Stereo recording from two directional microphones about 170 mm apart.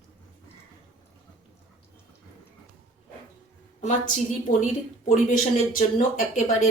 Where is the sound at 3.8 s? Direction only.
45° left (ahead or behind).